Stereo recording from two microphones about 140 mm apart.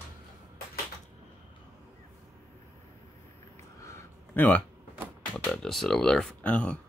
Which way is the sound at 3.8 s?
15° left (ahead or behind).